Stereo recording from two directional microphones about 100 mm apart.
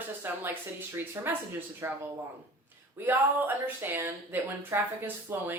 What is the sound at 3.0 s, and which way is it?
Speech, 20° right (ahead or behind).